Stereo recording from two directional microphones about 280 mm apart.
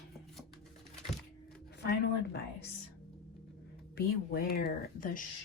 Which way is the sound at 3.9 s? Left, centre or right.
Left.